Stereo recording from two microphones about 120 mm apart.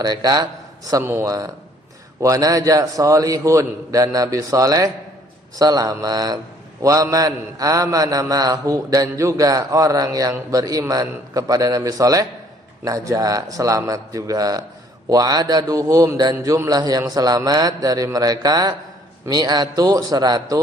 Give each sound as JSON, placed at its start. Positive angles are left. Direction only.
{"t": 0.0, "sound": "a man's voice", "side_deg": -35}
{"t": 0.9, "sound": "mantra", "side_deg": -25}
{"t": 5.5, "sound": "a man's voice", "side_deg": -30}
{"t": 6.8, "sound": "mantra", "side_deg": -30}
{"t": 15.1, "sound": "a man's voice", "side_deg": -30}